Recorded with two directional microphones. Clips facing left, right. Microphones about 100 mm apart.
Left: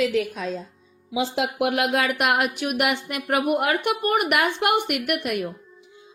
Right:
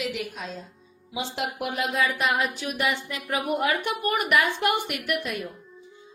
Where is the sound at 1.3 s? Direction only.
90° left; by 5.5 s 65° left (ahead or behind).